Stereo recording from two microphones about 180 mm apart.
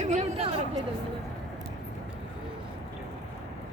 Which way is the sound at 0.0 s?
40° right (ahead or behind).